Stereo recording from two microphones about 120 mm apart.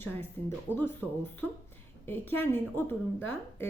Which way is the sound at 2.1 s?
15° left (ahead or behind).